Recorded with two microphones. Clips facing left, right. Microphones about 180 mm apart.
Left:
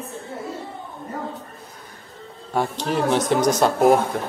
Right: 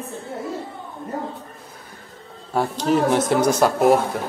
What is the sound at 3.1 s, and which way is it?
Speech, 10° right (ahead or behind).